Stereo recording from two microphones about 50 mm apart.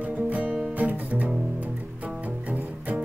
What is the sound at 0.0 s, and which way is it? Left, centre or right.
Music, right.